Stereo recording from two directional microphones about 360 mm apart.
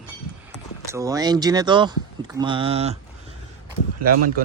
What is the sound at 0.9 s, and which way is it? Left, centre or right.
A man's voice, centre.